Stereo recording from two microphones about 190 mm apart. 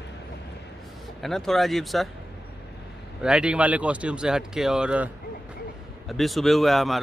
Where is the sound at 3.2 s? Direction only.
5° right (ahead or behind).